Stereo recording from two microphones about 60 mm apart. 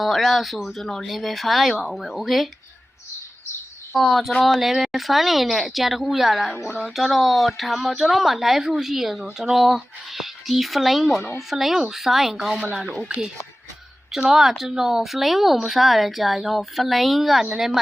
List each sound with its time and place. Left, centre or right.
0.0 s a woman's voice: centre
3.9 s a woman's voice: centre
14.2 s a woman's voice: centre